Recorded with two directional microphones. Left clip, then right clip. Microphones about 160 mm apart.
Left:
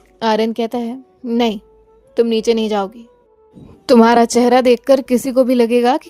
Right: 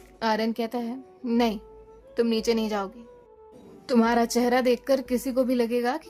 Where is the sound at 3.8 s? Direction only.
65° left (ahead or behind).